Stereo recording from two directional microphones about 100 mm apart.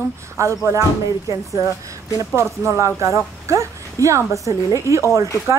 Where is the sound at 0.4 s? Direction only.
30° right (ahead or behind).